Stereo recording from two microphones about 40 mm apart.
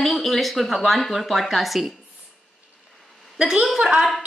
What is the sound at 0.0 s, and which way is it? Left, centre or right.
A woman's voice, centre.